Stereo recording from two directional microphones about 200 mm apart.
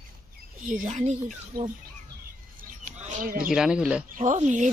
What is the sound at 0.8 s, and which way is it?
Speech, 35° right (ahead or behind).